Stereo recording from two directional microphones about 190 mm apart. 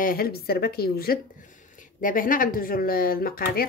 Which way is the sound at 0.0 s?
50° left (ahead or behind).